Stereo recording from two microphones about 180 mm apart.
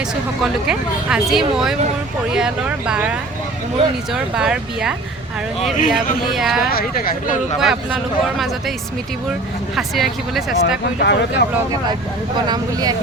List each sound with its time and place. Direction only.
0.4 s speech: 5° right (ahead or behind)
6.7 s speech: 55° left (ahead or behind)
7.6 s speech: 5° right (ahead or behind)
9.7 s speech: centre (ahead or behind)
11.0 s speech: 65° left (ahead or behind)
12.5 s speech: 20° right (ahead or behind)